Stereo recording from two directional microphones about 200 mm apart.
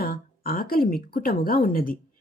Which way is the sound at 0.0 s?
45° left (ahead or behind).